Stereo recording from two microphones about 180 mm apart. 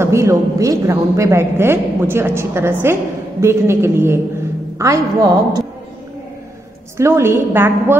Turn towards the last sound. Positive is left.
turn(degrees=-10)  # may be behind; listen again after turning